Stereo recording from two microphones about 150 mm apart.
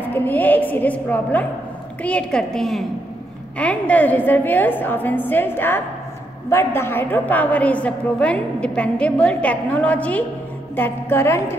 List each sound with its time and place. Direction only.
0.0 s a woman's voice: 15° left (ahead or behind)